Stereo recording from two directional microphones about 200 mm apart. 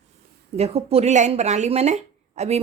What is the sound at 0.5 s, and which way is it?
Speech, 30° right (ahead or behind).